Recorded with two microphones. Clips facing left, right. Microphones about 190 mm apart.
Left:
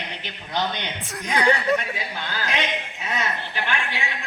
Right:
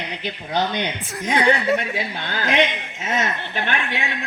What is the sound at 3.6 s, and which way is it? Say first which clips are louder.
Speech: right 2 dB; 65° right (ahead or behind).